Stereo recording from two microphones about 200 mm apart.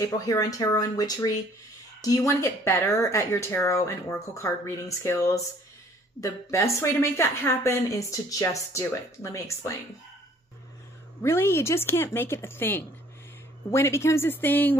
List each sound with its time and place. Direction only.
0.0 s a woman's voice: 15° left (ahead or behind)
11.2 s a woman's voice: 10° left (ahead or behind)